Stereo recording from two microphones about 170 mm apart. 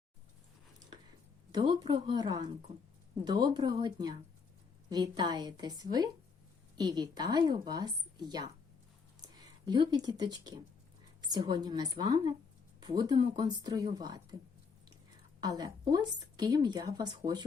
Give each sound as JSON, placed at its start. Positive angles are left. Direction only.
{"t": 1.5, "sound": "a woman's voice", "side_deg": -25}
{"t": 15.4, "sound": "a woman's voice", "side_deg": -25}